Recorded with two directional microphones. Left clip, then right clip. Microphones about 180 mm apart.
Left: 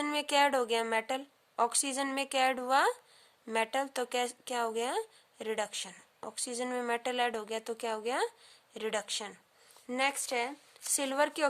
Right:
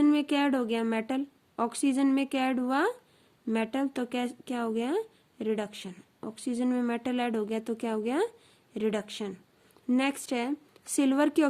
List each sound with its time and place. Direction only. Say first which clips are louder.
0.0 s speech: right 2 dB; 30° left (ahead or behind)